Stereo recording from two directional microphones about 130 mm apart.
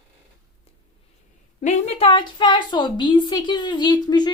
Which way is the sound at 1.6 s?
60° left (ahead or behind).